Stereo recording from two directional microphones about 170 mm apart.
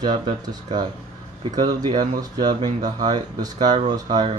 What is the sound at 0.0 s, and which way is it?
Speech, 25° right (ahead or behind).